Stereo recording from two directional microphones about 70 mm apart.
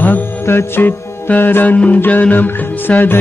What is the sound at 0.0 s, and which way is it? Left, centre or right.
Music, left.